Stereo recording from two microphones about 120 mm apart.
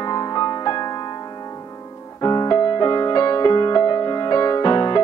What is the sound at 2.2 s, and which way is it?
Music, 35° left (ahead or behind).